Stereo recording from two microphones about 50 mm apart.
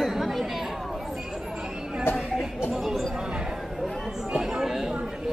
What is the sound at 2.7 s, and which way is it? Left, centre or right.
Speech, centre.